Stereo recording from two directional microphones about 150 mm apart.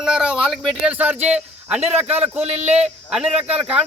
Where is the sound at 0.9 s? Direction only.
10° right (ahead or behind).